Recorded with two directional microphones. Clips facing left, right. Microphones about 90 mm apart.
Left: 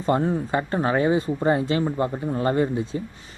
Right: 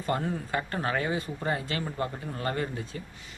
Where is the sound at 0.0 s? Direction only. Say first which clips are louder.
Left 8 dB; 25° left (ahead or behind).